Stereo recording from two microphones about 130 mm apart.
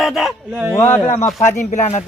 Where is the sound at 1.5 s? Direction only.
70° left (ahead or behind).